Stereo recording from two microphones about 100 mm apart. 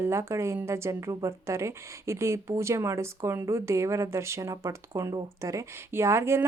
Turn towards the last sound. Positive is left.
turn(degrees=-25)  # may be behind; listen again after turning